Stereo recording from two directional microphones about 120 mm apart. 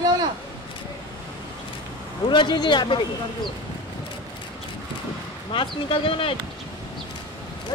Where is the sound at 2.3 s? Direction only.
40° left (ahead or behind).